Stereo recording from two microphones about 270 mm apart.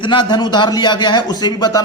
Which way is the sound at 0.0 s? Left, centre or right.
Centre.